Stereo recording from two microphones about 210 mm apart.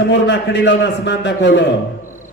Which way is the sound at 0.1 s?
55° left (ahead or behind).